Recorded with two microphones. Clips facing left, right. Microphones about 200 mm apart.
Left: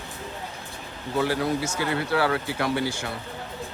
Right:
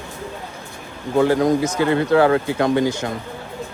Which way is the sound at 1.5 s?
15° right (ahead or behind).